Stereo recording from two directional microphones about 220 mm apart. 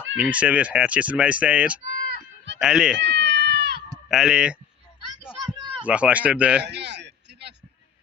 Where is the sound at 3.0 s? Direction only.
55° right (ahead or behind).